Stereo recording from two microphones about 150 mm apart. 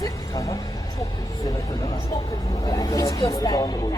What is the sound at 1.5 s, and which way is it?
Speech, 20° left (ahead or behind).